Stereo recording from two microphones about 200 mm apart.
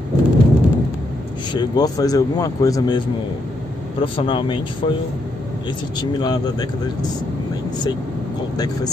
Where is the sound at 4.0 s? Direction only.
25° left (ahead or behind).